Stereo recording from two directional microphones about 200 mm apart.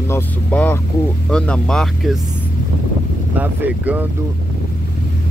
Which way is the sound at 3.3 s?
10° right (ahead or behind).